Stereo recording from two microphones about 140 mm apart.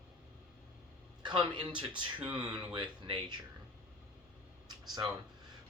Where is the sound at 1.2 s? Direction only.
35° right (ahead or behind).